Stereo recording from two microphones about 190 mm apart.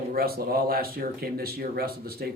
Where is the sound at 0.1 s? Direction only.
50° right (ahead or behind).